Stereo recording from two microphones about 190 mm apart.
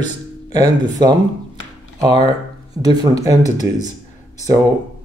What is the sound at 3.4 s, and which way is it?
Speech, 40° left (ahead or behind).